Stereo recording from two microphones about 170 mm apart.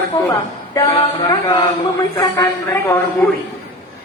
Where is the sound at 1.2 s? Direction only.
25° left (ahead or behind).